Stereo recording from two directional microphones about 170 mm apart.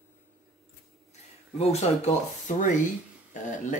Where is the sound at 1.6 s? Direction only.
40° left (ahead or behind).